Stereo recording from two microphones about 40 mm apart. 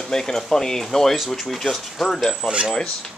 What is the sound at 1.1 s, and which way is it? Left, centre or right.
Speech, centre.